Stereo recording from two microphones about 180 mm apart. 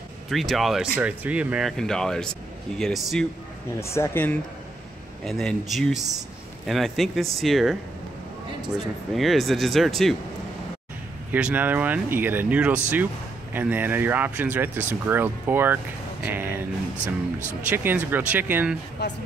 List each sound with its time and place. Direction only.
0.3 s speech: centre (ahead or behind)
3.8 s speech: 15° left (ahead or behind)
9.1 s speech: centre (ahead or behind)
11.3 s speech: 10° right (ahead or behind)
19.0 s speech: 70° left (ahead or behind)